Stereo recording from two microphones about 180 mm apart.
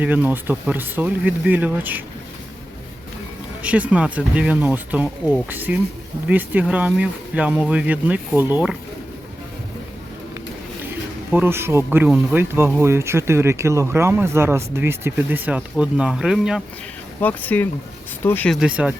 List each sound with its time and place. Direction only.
0.0 s speech: 10° right (ahead or behind)
3.6 s speech: 5° right (ahead or behind)
11.3 s speech: 10° right (ahead or behind)
17.2 s speech: 10° left (ahead or behind); by 18.9 s 5° right (ahead or behind)